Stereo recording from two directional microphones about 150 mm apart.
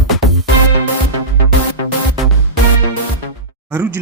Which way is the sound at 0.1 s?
Centre (ahead or behind).